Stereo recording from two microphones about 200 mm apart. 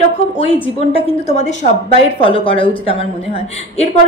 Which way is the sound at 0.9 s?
35° left (ahead or behind).